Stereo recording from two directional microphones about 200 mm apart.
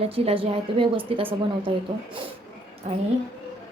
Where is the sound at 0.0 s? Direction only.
30° right (ahead or behind).